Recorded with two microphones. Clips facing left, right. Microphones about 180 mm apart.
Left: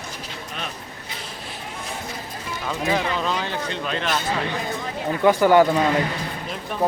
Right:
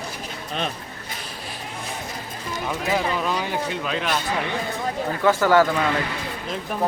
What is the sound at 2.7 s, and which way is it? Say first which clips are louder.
Speech: left 1 dB; 10° right (ahead or behind).